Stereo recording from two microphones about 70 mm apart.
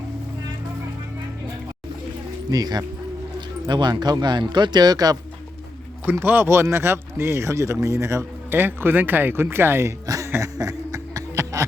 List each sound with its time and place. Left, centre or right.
2.5 s speech: right
3.7 s speech: right
6.1 s speech: right
8.4 s speech: right
10.2 s a sound: right
10.6 s snicker: right